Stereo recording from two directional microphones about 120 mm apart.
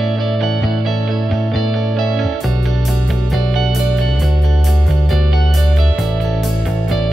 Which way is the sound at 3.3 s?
Centre (ahead or behind).